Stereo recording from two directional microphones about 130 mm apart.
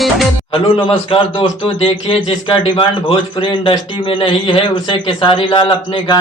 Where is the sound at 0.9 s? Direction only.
45° left (ahead or behind).